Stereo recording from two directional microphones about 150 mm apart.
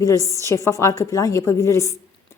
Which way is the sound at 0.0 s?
20° left (ahead or behind).